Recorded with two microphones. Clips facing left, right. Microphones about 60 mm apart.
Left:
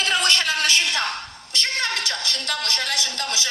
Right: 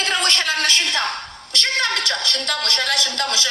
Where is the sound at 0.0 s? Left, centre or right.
Right.